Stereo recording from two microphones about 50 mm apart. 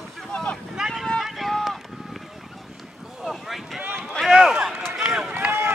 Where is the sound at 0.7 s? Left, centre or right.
Centre.